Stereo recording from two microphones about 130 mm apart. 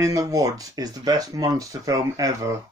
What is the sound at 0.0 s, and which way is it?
Speech, 25° right (ahead or behind).